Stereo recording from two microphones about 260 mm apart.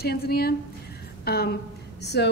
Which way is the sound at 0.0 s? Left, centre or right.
Left.